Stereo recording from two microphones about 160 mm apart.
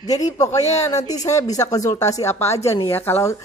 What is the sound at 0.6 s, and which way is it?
Speech, 45° left (ahead or behind).